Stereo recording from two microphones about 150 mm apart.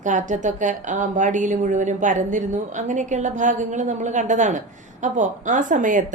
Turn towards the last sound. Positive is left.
turn(degrees=-60)  # may be behind; listen again after turning